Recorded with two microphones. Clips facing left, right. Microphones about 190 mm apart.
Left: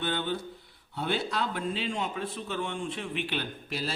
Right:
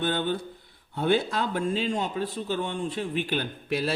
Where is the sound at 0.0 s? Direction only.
45° right (ahead or behind).